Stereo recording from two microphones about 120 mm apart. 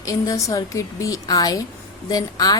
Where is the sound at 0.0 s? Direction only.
30° left (ahead or behind).